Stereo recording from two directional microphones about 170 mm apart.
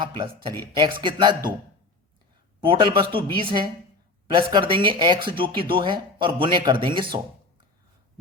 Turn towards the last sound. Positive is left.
turn(degrees=-30)  # may be behind; listen again after turning